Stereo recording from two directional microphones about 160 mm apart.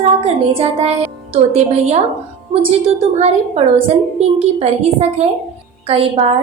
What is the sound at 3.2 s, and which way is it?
A woman's voice, 40° right (ahead or behind).